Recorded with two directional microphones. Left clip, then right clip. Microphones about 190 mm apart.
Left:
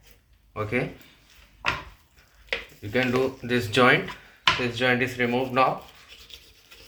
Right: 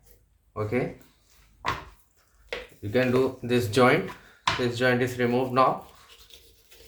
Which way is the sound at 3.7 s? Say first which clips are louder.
Left 2 dB; 20° right (ahead or behind).